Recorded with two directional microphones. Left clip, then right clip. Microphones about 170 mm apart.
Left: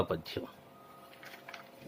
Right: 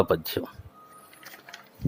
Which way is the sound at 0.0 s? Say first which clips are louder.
Right 10 dB; 40° right (ahead or behind).